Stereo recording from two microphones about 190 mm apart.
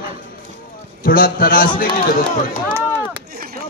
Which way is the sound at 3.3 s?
55° right (ahead or behind).